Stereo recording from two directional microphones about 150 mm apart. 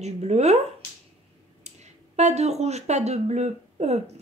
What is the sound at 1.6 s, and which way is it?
Speech, 50° right (ahead or behind).